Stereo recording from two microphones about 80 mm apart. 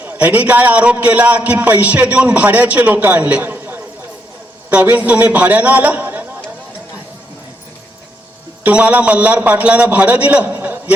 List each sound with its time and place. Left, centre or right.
0.0 s a man's voice: right
8.6 s a man's voice: centre